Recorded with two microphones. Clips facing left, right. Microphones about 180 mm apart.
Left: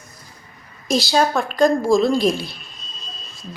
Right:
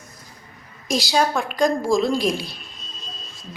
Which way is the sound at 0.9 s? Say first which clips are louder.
Left 3 dB; 15° right (ahead or behind).